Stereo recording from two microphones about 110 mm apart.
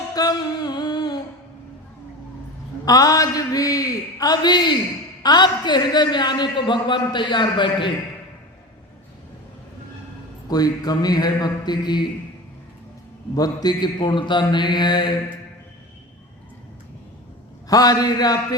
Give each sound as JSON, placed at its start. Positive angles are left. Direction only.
{"t": 0.1, "sound": "music", "side_deg": 40}
{"t": 2.8, "sound": "a man's voice", "side_deg": 35}
{"t": 10.5, "sound": "a man's voice", "side_deg": 35}
{"t": 13.3, "sound": "a man's voice", "side_deg": 35}
{"t": 17.7, "sound": "a man's voice", "side_deg": 35}